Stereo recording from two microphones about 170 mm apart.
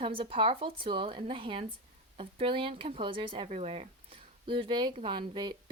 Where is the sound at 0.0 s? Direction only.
30° right (ahead or behind).